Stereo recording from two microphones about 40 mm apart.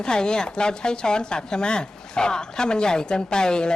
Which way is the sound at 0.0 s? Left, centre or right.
Left.